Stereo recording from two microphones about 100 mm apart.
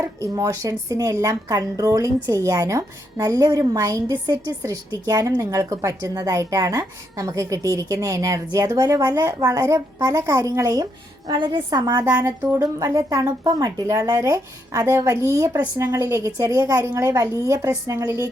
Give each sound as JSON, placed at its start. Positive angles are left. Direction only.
{"t": 0.0, "sound": "a woman's voice", "side_deg": -30}
{"t": 11.3, "sound": "a woman's voice", "side_deg": -50}
{"t": 12.1, "sound": "speech", "side_deg": -20}
{"t": 12.6, "sound": "a woman's voice", "side_deg": -35}